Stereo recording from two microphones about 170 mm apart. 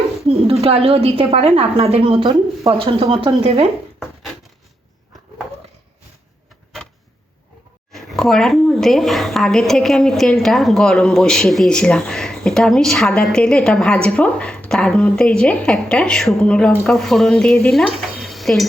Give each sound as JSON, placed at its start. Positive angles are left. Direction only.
{"t": 0.6, "sound": "a woman's voice", "side_deg": -35}
{"t": 7.9, "sound": "a woman's voice", "side_deg": 0}